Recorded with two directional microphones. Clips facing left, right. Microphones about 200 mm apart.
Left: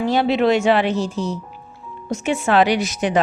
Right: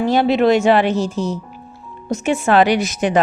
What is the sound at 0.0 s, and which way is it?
A woman's voice, 50° right (ahead or behind).